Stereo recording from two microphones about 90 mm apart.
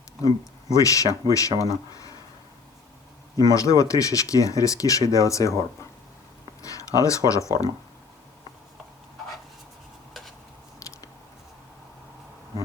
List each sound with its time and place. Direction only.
0.8 s speech: 40° left (ahead or behind)
3.3 s speech: 40° left (ahead or behind)
6.6 s a sound: 40° left (ahead or behind)
7.3 s speech: 35° left (ahead or behind)